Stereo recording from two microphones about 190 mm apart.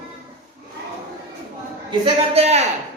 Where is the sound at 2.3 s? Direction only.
35° right (ahead or behind).